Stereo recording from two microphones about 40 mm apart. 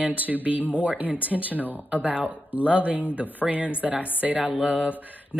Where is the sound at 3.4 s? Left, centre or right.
Right.